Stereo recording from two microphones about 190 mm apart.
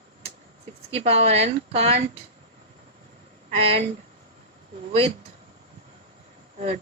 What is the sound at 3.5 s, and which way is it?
Speech, 30° right (ahead or behind).